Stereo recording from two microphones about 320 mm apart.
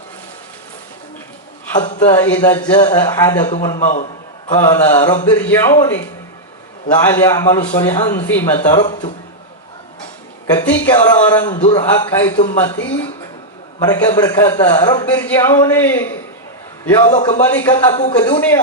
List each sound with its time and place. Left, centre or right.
2.0 s a man's voice: centre
3.8 s a man's voice: left
7.1 s a man's voice: centre
8.7 s speech: left
10.5 s a man's voice: centre
13.7 s a man's voice: centre
17.1 s speech: left
17.5 s a man's voice: centre